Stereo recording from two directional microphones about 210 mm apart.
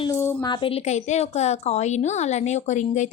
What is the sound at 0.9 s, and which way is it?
A woman's voice, 30° left (ahead or behind).